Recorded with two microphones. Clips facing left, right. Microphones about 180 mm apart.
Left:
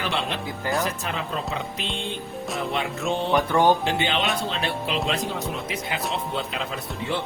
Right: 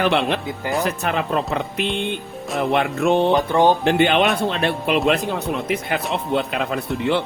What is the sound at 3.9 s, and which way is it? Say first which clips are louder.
Speech: right 8 dB; 60° right (ahead or behind).